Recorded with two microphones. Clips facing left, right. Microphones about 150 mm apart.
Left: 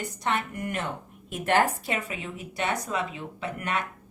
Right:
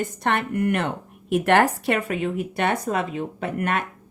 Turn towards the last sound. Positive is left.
turn(degrees=-50)  # may be behind; listen again after turning